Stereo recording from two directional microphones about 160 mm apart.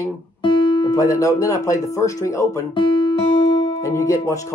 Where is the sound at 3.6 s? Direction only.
20° left (ahead or behind).